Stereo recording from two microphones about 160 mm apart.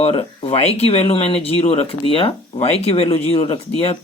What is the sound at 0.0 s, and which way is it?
Speech, 35° left (ahead or behind).